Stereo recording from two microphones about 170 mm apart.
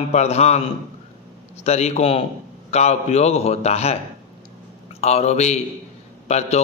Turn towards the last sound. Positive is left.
turn(degrees=40)  # may be behind; listen again after turning